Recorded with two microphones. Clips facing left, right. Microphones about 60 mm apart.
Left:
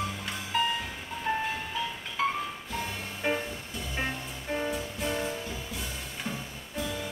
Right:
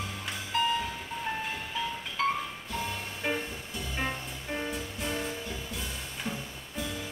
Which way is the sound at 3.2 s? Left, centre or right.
Centre.